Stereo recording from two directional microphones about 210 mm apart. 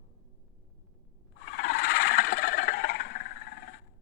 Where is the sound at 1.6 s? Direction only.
45° left (ahead or behind).